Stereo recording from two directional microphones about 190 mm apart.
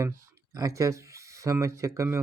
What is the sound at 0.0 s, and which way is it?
Speech, 15° right (ahead or behind).